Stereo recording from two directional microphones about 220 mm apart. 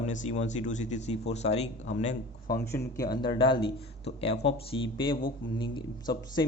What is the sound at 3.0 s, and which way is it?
A man's voice, 20° left (ahead or behind).